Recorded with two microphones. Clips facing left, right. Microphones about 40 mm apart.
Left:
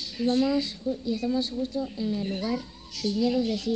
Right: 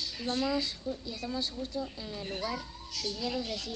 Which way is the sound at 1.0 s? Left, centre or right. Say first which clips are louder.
Left 9 dB; left.